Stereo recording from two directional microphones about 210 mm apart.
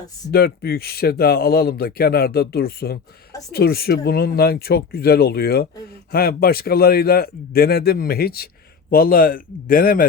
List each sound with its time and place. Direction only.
0.3 s speech: 50° left (ahead or behind)